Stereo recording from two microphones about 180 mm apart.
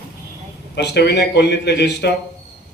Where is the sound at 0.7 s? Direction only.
65° left (ahead or behind).